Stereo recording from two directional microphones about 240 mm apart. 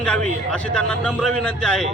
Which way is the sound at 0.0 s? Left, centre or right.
Centre.